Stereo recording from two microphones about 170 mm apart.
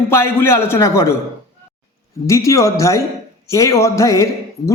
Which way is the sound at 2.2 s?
15° left (ahead or behind).